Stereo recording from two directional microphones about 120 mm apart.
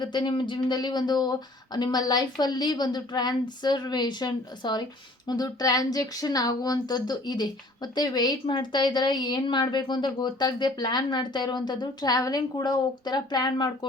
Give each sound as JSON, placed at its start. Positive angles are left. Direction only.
{"t": 0.0, "sound": "speech", "side_deg": 40}